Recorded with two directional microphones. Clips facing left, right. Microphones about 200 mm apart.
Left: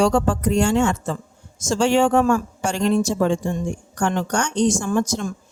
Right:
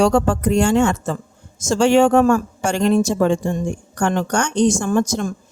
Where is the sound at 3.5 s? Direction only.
50° right (ahead or behind).